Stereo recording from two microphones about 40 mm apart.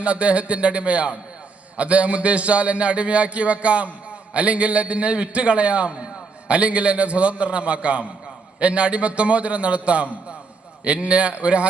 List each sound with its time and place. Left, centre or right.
0.0 s a man's voice: right